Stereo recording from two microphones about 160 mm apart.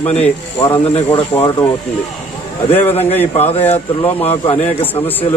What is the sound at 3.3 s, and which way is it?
Speech, 40° left (ahead or behind).